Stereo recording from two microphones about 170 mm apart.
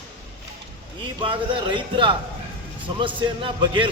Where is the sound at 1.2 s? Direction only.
30° right (ahead or behind).